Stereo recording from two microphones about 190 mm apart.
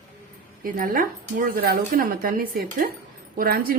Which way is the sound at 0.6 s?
50° right (ahead or behind).